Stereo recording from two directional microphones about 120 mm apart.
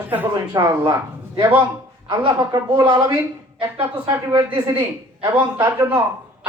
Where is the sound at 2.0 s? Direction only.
40° right (ahead or behind).